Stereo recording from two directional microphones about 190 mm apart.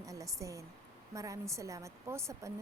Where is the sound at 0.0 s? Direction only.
15° right (ahead or behind).